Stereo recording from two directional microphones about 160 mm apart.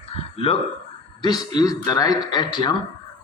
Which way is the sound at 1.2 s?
25° left (ahead or behind).